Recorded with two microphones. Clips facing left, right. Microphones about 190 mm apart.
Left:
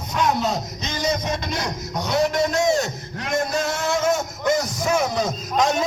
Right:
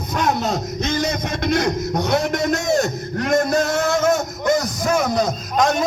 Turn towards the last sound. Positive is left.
turn(degrees=-50)  # may be behind; listen again after turning